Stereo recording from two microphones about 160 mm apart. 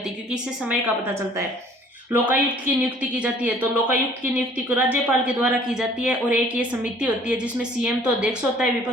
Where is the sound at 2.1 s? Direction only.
10° right (ahead or behind).